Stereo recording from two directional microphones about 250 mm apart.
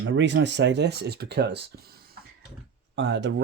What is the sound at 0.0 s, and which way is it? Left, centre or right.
Speech, right.